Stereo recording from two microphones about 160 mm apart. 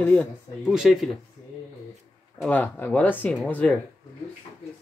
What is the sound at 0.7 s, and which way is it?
Speech, 5° right (ahead or behind).